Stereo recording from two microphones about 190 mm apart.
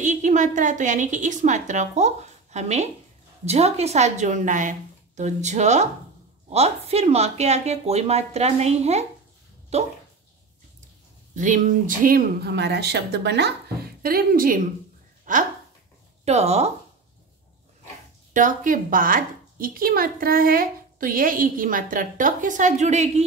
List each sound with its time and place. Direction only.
0.0 s a woman's voice: 40° right (ahead or behind)
11.3 s speech: 40° right (ahead or behind); by 13.6 s 65° right (ahead or behind)
14.0 s a woman's voice: 50° right (ahead or behind); by 16.7 s 35° right (ahead or behind)
18.3 s a woman's voice: 45° right (ahead or behind)